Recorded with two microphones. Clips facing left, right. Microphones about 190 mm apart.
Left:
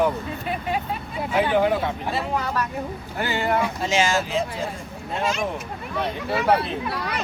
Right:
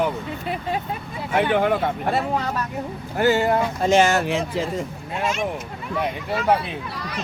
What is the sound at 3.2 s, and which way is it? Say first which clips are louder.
Speech: right 5 dB; 45° right (ahead or behind).